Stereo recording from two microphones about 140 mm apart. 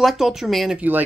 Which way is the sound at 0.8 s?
15° right (ahead or behind).